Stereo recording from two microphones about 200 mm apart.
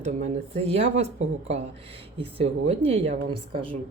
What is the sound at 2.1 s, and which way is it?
Speech, 30° right (ahead or behind).